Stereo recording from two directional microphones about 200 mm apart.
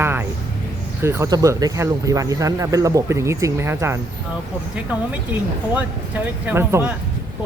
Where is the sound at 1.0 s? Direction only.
15° right (ahead or behind).